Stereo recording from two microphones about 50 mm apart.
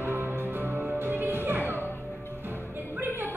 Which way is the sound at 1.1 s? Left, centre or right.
Right.